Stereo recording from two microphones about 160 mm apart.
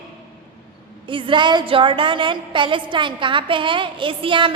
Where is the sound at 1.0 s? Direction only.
30° right (ahead or behind).